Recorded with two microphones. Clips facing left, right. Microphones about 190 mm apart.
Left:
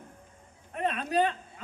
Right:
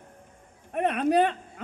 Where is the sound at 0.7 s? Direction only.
65° right (ahead or behind).